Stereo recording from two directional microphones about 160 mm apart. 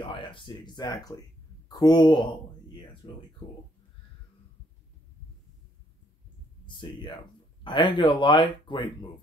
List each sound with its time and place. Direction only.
0.0 s speech: 30° left (ahead or behind)
6.6 s speech: 30° left (ahead or behind)